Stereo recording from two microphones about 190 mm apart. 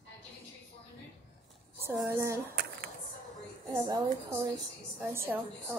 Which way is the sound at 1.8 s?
15° right (ahead or behind).